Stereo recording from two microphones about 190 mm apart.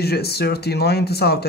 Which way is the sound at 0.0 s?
55° left (ahead or behind).